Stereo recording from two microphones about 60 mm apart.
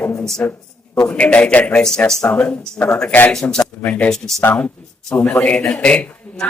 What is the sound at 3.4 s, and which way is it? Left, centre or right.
Speech, left.